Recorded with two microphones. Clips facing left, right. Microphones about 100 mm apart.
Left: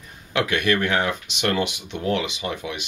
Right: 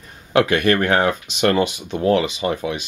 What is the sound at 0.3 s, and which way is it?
Speech, 40° right (ahead or behind).